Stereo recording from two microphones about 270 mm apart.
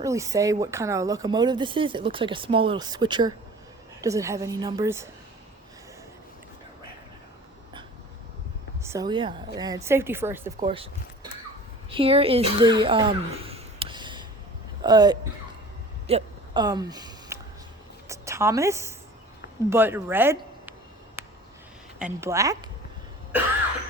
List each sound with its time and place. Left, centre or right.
0.0 s speech: centre
8.8 s speech: centre
10.7 s speech: centre
16.0 s a sound: centre
18.1 s a woman's voice: centre
21.9 s speech: centre